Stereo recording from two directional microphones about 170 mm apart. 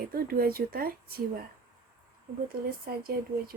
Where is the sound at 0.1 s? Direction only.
60° right (ahead or behind).